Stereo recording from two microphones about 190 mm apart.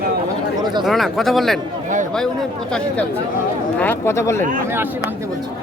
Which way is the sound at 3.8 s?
10° left (ahead or behind).